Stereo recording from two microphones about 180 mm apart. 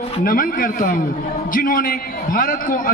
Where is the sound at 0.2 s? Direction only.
50° left (ahead or behind).